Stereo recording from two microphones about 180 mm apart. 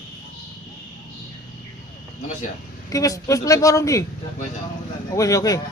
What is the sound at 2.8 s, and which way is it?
A woman's voice, 20° left (ahead or behind).